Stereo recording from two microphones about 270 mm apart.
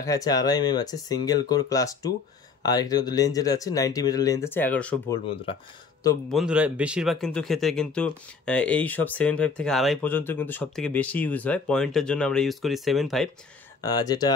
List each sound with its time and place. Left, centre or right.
0.0 s speech: centre
5.3 s speech: left
6.2 s speech: centre
13.8 s speech: centre